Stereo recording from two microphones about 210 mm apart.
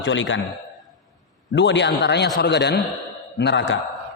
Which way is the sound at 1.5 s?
60° left (ahead or behind).